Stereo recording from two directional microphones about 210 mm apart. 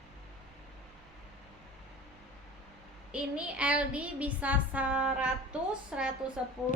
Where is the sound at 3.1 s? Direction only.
5° right (ahead or behind).